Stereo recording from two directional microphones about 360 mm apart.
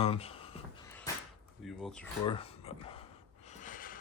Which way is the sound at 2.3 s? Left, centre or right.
Centre.